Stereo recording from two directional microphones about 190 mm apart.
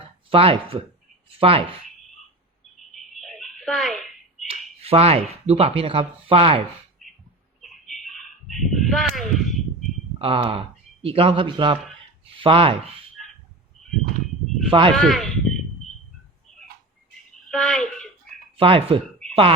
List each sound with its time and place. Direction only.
0.3 s a man's voice: 30° right (ahead or behind)
2.9 s a sound: centre (ahead or behind)
4.4 s speech: 30° right (ahead or behind)
7.0 s bird: centre (ahead or behind)
10.2 s a man's voice: 30° right (ahead or behind)
14.7 s a man's voice: 25° right (ahead or behind)
14.9 s speech: centre (ahead or behind)
17.5 s a sound: 5° left (ahead or behind)
18.5 s speech: 30° right (ahead or behind)